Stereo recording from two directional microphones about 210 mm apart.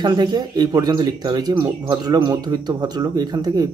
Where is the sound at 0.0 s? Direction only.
20° right (ahead or behind).